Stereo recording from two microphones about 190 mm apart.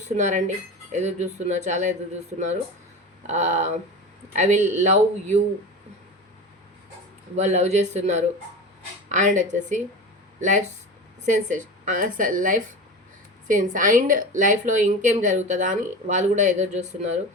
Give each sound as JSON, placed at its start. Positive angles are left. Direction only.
{"t": 0.2, "sound": "a woman's voice", "side_deg": -40}
{"t": 3.2, "sound": "a woman's voice", "side_deg": -40}
{"t": 7.3, "sound": "a woman's voice", "side_deg": -35}
{"t": 11.3, "sound": "a woman's voice", "side_deg": -40}